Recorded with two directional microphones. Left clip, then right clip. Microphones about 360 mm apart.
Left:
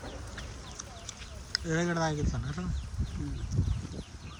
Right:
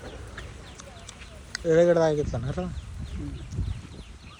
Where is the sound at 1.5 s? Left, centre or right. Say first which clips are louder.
Right 12 dB; centre.